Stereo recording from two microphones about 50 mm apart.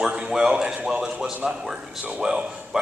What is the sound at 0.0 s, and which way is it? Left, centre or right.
A man's voice, right.